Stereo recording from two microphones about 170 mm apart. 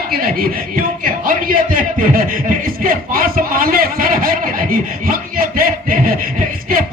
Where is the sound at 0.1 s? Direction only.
60° right (ahead or behind).